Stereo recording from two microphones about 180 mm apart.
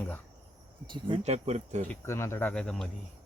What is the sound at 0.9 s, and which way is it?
Speech, 30° right (ahead or behind).